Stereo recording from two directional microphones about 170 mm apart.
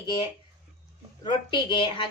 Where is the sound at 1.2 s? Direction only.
30° left (ahead or behind).